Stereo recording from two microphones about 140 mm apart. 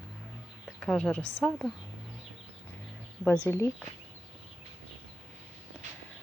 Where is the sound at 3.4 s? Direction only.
20° left (ahead or behind).